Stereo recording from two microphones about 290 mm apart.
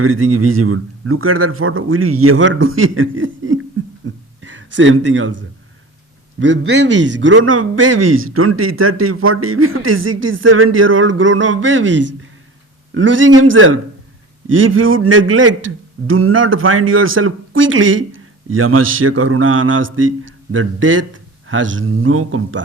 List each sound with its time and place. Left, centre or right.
0.0 s speech: right
4.8 s speech: right
12.9 s a man's voice: right